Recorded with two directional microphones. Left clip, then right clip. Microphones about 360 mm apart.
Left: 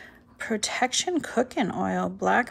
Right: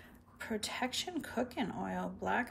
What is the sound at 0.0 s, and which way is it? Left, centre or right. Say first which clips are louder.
Speech: left 11 dB; centre.